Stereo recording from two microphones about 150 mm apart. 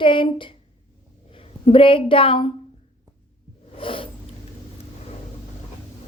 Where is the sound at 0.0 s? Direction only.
35° left (ahead or behind).